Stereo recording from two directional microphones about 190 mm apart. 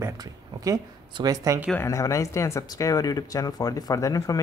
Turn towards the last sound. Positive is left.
turn(degrees=15)  # may be behind; listen again after turning